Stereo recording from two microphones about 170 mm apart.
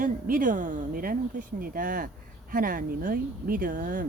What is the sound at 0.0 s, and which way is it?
Speech, 55° right (ahead or behind).